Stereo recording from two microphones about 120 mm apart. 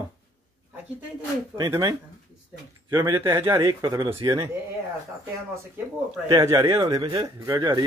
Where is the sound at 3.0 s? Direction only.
35° right (ahead or behind).